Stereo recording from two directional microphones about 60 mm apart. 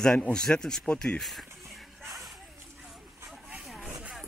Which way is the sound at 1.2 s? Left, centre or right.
Centre.